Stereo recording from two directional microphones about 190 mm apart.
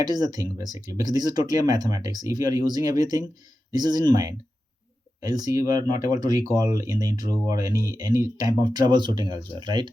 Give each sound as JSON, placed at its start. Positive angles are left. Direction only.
{"t": 0.0, "sound": "speech", "side_deg": -20}